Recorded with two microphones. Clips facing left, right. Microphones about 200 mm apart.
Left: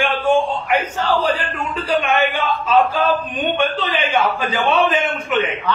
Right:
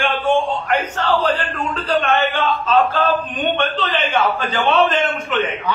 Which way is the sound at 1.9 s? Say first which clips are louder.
Even; 10° left (ahead or behind).